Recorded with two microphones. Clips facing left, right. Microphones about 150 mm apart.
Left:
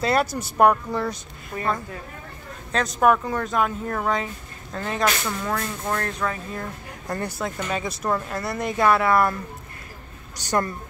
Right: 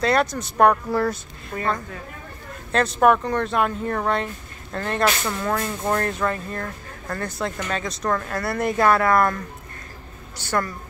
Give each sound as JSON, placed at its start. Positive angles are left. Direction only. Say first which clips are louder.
{"t": 0.0, "sound": "speech", "louder": "right 1 dB", "side_deg": 5}
{"t": 2.7, "sound": "speech", "louder": "right 2 dB", "side_deg": 0}
{"t": 10.3, "sound": "a woman's voice", "louder": "left 1 dB", "side_deg": 15}